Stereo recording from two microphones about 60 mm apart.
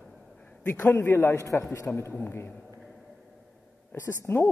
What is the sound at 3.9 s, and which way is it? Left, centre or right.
Speech, left.